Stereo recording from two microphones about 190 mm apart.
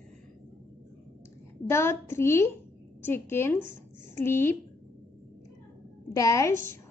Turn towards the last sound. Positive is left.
turn(degrees=15)  # may be behind; listen again after turning